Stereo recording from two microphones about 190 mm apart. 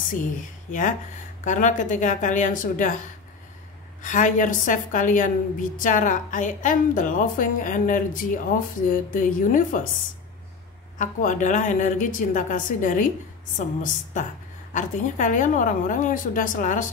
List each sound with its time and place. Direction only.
0.7 s a woman's voice: 45° left (ahead or behind)
4.0 s a woman's voice: 40° left (ahead or behind)
11.0 s a woman's voice: 40° left (ahead or behind)